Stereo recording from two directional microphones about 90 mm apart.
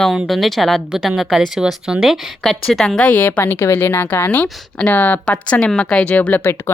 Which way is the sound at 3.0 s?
20° left (ahead or behind).